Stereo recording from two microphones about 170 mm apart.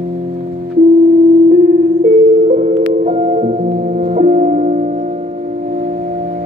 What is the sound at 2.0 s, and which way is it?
Music, 45° right (ahead or behind).